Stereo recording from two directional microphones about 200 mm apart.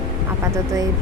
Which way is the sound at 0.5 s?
15° right (ahead or behind).